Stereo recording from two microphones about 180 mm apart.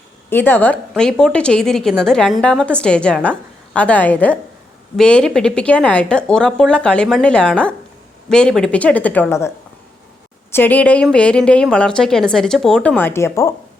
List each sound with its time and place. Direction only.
0.3 s a woman's voice: 10° left (ahead or behind)
10.5 s a woman's voice: 10° left (ahead or behind)